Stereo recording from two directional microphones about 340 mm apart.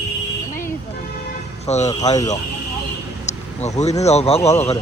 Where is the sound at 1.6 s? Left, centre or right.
Centre.